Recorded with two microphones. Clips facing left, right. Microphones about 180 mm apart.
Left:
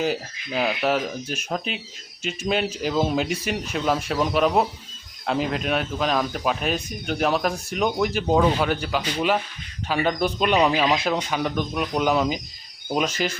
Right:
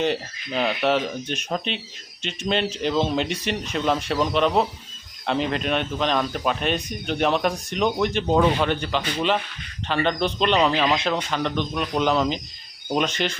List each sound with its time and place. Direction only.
0.0 s speech: 5° left (ahead or behind)